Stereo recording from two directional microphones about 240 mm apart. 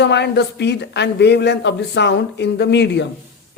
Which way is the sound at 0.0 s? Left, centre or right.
Left.